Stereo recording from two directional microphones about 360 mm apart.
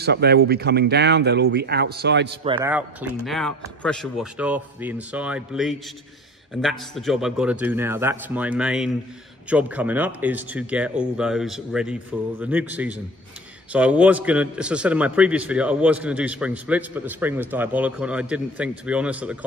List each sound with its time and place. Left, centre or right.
0.0 s speech: right
2.4 s a man's voice: centre